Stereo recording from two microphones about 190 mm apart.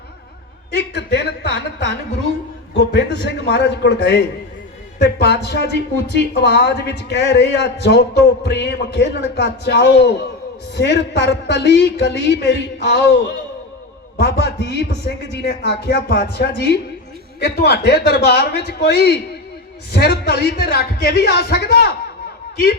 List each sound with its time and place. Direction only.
0.9 s a man's voice: 60° left (ahead or behind)